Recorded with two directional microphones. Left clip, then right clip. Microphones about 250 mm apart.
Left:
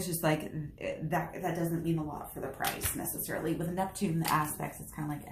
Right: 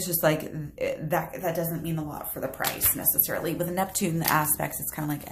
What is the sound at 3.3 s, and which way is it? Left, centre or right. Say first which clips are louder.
A woman's voice: right 5 dB; right.